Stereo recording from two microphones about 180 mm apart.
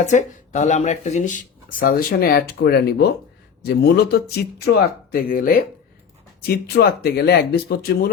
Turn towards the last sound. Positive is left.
turn(degrees=60)  # may be behind; listen again after turning